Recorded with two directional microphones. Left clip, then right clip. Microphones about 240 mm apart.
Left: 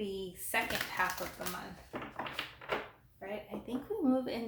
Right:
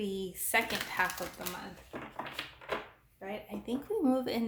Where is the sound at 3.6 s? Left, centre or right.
Right.